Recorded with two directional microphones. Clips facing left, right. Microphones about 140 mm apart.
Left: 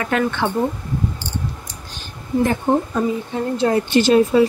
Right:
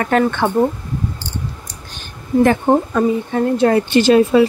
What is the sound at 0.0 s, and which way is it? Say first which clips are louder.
Speech: right 4 dB; 50° right (ahead or behind).